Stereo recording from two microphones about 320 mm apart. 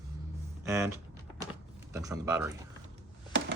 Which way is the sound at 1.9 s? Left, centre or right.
Centre.